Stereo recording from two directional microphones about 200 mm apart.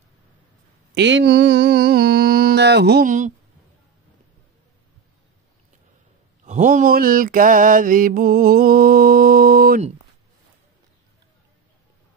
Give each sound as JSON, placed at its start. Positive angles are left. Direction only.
{"t": 0.9, "sound": "mantra", "side_deg": -60}
{"t": 3.1, "sound": "speech", "side_deg": -40}
{"t": 6.4, "sound": "mantra", "side_deg": -40}